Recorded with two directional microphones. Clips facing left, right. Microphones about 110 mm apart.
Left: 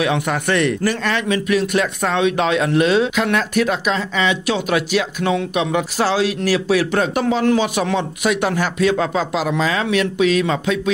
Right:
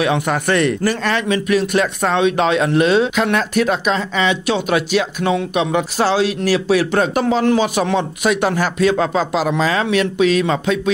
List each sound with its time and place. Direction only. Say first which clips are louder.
0.0 s a man's voice: right 2 dB; 35° right (ahead or behind)